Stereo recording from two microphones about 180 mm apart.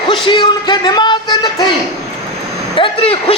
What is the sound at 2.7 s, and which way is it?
Speech, 30° left (ahead or behind).